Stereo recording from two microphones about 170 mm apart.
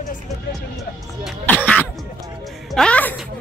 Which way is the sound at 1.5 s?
10° left (ahead or behind).